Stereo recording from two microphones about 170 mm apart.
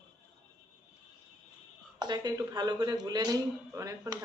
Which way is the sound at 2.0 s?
25° right (ahead or behind).